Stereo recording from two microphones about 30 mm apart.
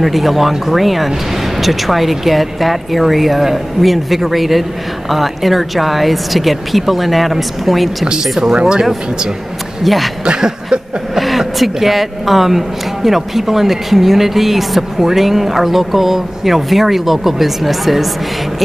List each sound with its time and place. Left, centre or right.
0.0 s speech: centre
9.8 s speech: centre
10.2 s a sound: right
11.1 s a woman's voice: centre